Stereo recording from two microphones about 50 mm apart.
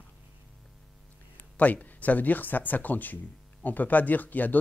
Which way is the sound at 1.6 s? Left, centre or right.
Left.